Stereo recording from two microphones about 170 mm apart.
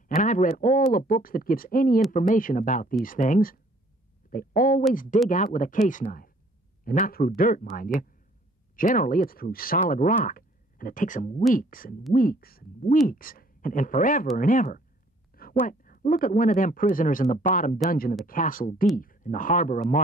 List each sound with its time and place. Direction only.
0.1 s a man's voice: 50° left (ahead or behind)